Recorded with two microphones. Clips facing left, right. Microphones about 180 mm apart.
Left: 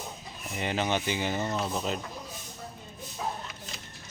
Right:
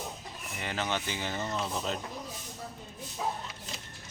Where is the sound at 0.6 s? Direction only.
20° left (ahead or behind).